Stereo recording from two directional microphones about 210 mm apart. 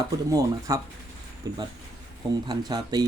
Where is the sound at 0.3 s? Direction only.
15° right (ahead or behind).